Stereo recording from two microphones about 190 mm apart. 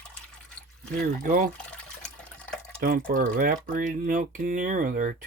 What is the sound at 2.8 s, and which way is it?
Speech, 50° right (ahead or behind).